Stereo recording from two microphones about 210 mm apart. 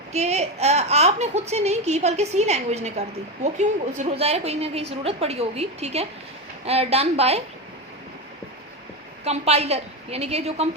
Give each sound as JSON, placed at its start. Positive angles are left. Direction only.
{"t": 0.1, "sound": "a woman's voice", "side_deg": -30}
{"t": 9.2, "sound": "a woman's voice", "side_deg": -30}